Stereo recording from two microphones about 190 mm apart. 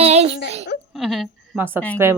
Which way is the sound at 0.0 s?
35° right (ahead or behind).